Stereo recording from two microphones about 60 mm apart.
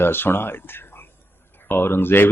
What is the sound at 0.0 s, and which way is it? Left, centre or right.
Speech, left.